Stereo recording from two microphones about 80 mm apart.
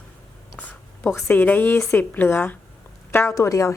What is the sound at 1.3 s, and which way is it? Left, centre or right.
Speech, left.